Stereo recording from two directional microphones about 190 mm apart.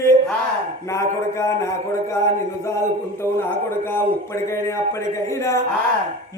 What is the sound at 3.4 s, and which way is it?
Speech, 10° left (ahead or behind).